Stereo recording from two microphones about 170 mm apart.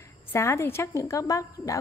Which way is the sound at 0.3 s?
15° left (ahead or behind).